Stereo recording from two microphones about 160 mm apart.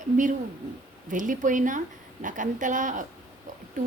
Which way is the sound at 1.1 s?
55° right (ahead or behind).